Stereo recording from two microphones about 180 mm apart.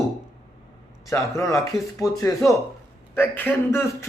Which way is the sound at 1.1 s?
15° left (ahead or behind).